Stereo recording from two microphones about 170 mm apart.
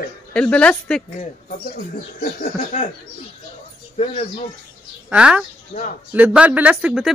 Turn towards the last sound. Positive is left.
turn(degrees=-5)  # may be behind; listen again after turning